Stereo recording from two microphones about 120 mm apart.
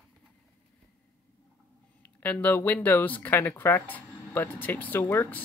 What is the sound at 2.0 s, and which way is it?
Speech, 10° left (ahead or behind).